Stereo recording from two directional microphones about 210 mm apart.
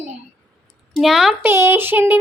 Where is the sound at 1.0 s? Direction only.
Centre (ahead or behind).